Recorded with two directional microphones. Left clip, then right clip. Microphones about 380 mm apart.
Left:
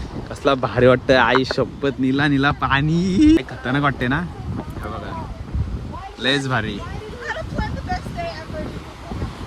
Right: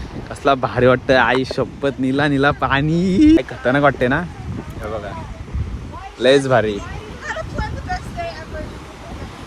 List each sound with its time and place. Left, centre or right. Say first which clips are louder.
0.3 s speech: right 2 dB; centre
6.2 s speech: right 7 dB; centre
7.3 s a sound: right 2 dB; left